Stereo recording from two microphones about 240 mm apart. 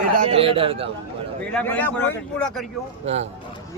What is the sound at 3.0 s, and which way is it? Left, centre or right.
Speech, right.